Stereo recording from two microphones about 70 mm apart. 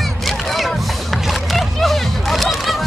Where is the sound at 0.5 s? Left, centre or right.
Centre.